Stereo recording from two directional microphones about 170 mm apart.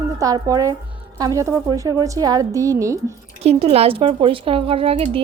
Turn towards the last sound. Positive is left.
turn(degrees=-35)  # may be behind; listen again after turning